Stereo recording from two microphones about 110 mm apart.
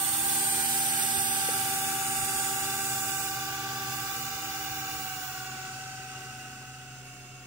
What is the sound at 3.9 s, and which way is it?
Vehicle, 20° right (ahead or behind).